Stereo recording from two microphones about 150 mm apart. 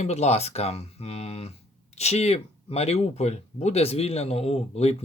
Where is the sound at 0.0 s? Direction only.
45° left (ahead or behind).